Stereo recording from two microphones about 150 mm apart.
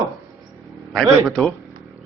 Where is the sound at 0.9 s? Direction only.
Centre (ahead or behind).